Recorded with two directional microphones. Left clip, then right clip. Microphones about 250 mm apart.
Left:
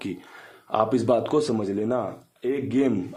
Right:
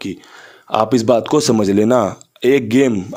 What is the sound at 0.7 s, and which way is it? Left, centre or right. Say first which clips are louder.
Speech: right 8 dB; right.